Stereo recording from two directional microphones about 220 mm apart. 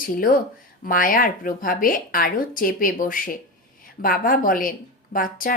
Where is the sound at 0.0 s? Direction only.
40° left (ahead or behind).